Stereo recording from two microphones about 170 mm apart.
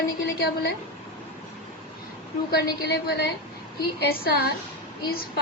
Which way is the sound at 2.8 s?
70° left (ahead or behind).